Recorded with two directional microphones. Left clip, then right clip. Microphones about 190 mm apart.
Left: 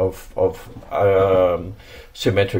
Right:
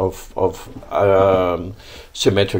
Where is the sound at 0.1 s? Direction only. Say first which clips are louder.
Even; 20° right (ahead or behind).